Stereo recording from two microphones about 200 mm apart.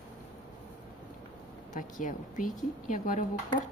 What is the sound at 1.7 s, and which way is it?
A woman's voice, 40° left (ahead or behind).